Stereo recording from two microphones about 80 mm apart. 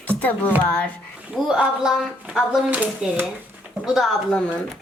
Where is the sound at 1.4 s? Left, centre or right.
Centre.